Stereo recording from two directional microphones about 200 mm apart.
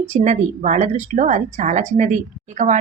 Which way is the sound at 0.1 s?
35° right (ahead or behind).